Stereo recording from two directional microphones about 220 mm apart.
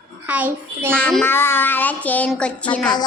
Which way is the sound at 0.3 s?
5° right (ahead or behind).